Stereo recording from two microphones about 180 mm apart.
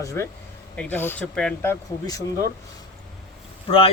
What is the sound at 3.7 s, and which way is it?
Speech, 30° left (ahead or behind).